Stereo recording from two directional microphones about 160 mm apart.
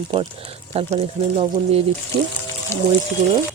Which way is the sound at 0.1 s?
35° right (ahead or behind).